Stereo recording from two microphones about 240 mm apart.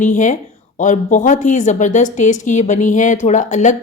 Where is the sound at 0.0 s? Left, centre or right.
Left.